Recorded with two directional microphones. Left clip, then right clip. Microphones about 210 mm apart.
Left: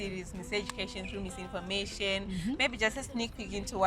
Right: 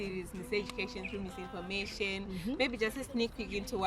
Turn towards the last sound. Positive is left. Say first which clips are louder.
# even
turn(degrees=35)  # may be behind; listen again after turning